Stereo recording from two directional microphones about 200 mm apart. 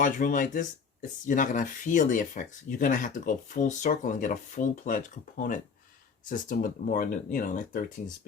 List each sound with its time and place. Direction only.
0.0 s speech: 40° left (ahead or behind)